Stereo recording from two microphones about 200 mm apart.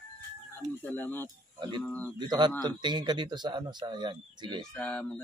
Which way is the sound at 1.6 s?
20° right (ahead or behind).